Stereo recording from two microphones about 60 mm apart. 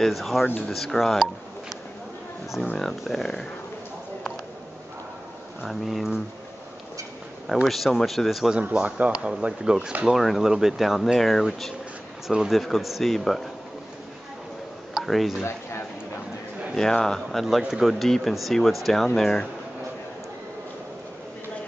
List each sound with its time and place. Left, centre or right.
0.0 s speech: centre
2.8 s speech: centre
5.7 s speech: centre
7.6 s speech: centre
8.5 s speech: right
10.0 s speech: centre
15.0 s speech: centre
16.7 s speech: centre